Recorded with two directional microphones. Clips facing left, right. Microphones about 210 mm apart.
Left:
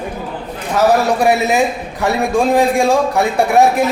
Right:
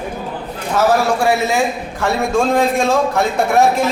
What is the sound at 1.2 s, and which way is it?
A man's voice, 20° left (ahead or behind).